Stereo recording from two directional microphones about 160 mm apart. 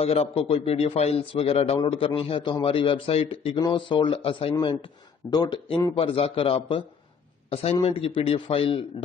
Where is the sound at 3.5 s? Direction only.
30° left (ahead or behind).